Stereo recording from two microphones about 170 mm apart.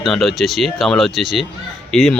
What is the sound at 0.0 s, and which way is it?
Speech, centre (ahead or behind).